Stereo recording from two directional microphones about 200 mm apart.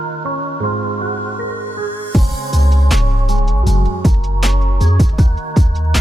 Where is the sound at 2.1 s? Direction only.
Centre (ahead or behind).